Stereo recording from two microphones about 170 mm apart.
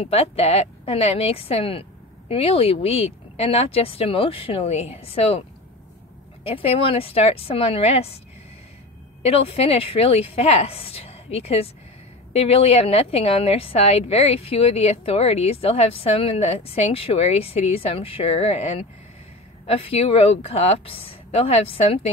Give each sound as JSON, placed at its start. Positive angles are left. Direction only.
{"t": 0.0, "sound": "a woman's voice", "side_deg": 35}
{"t": 6.4, "sound": "a woman's voice", "side_deg": 35}
{"t": 9.2, "sound": "a woman's voice", "side_deg": 35}